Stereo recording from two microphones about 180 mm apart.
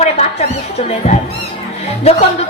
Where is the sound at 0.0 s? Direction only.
35° left (ahead or behind).